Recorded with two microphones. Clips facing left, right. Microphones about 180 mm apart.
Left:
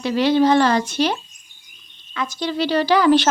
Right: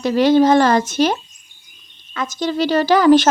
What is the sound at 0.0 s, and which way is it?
Speech, 45° right (ahead or behind).